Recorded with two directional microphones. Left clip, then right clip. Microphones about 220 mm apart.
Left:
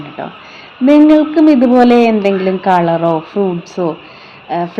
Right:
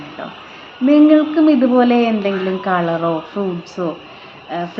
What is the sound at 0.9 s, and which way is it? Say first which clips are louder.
A woman's voice: left 3 dB; 25° left (ahead or behind).